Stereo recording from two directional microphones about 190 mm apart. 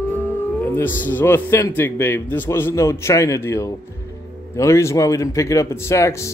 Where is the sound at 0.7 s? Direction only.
10° left (ahead or behind).